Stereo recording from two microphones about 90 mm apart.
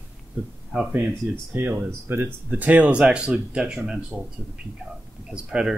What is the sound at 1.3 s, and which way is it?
Speech, 25° right (ahead or behind).